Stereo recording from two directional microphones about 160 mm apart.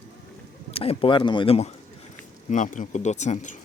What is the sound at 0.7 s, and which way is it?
Speech, 35° left (ahead or behind).